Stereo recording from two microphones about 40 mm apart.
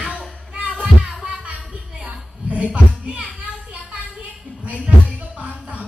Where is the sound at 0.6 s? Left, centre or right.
Right.